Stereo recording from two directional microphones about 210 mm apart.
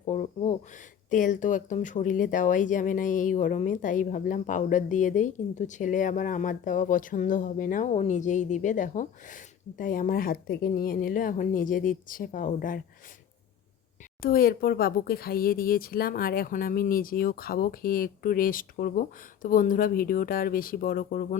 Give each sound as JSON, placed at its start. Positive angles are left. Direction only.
{"t": 0.0, "sound": "speech", "side_deg": 35}
{"t": 14.2, "sound": "speech", "side_deg": 45}